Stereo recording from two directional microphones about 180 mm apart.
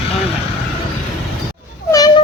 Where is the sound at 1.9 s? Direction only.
20° left (ahead or behind).